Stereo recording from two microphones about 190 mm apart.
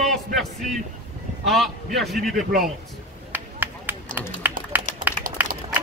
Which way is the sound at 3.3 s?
10° right (ahead or behind).